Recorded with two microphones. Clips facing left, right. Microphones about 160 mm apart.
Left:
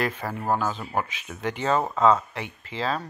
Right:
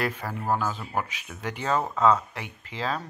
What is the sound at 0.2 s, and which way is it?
Speech, 10° left (ahead or behind).